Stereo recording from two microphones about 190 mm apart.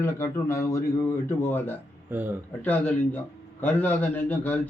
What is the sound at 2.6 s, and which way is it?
Speech, 10° left (ahead or behind).